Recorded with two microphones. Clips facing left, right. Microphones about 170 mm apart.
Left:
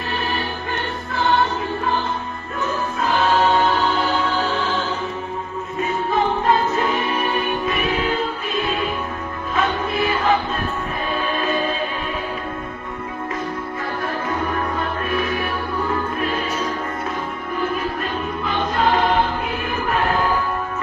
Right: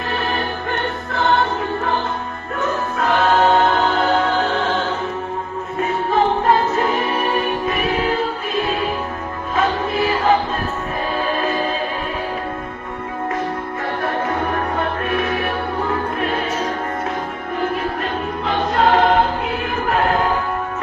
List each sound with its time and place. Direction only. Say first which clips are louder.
0.3 s music: right 3 dB; 50° right (ahead or behind)
2.6 s music: right 2 dB; 55° right (ahead or behind)
6.5 s music: right 2 dB; 40° right (ahead or behind)
9.6 s music: right 2 dB; 35° right (ahead or behind)
11.3 s music: right 1 dB; 40° right (ahead or behind)
14.0 s music: right 3 dB; 55° right (ahead or behind)
18.4 s choir: right 3 dB; 60° right (ahead or behind)